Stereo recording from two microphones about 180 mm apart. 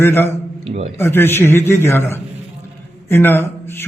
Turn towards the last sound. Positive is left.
turn(degrees=15)  # may be behind; listen again after turning